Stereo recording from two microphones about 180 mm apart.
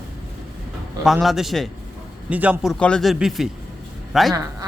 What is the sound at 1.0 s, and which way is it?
A man's voice, centre (ahead or behind).